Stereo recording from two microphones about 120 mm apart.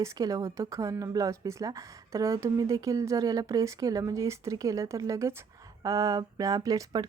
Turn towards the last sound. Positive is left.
turn(degrees=-30)  # may be behind; listen again after turning